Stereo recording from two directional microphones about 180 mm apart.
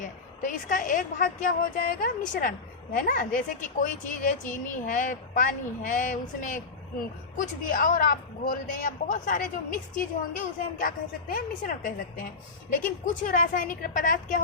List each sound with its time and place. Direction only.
0.0 s a woman's voice: 45° left (ahead or behind)